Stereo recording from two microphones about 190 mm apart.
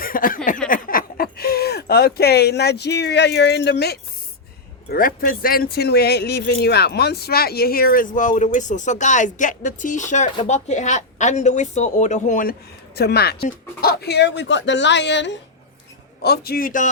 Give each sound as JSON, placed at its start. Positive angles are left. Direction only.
{"t": 0.0, "sound": "a sound", "side_deg": 45}
{"t": 0.7, "sound": "speech", "side_deg": 45}
{"t": 4.9, "sound": "a woman's voice", "side_deg": 50}
{"t": 13.0, "sound": "speech", "side_deg": 55}
{"t": 16.2, "sound": "speech", "side_deg": 55}